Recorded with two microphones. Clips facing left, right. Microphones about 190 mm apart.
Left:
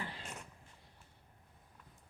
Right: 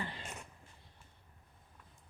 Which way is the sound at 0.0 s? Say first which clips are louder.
Right 2 dB; centre (ahead or behind).